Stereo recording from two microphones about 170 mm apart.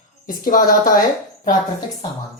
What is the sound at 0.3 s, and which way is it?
Speech, 55° left (ahead or behind).